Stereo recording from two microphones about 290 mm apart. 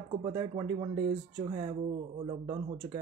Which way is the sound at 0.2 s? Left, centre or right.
Centre.